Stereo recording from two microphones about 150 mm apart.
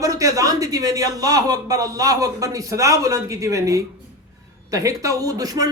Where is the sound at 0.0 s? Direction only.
20° right (ahead or behind).